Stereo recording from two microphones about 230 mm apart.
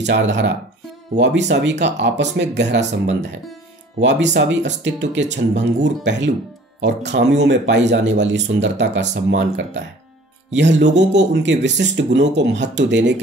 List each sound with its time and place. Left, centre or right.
0.0 s speech: right